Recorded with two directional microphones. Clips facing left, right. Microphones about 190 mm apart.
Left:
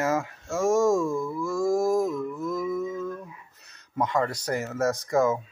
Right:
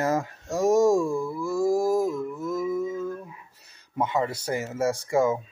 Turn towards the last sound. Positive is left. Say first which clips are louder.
# even
turn(degrees=-10)  # may be behind; listen again after turning